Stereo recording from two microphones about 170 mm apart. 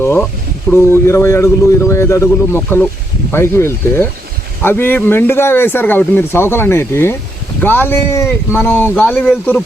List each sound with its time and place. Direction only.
0.7 s speech: 15° left (ahead or behind)